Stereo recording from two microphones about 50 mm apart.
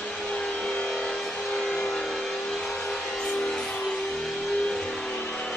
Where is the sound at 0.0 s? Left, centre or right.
Centre.